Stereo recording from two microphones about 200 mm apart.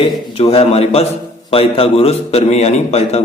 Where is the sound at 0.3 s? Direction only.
30° left (ahead or behind).